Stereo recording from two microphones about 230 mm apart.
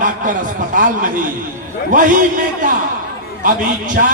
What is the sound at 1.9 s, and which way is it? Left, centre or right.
Speech, right.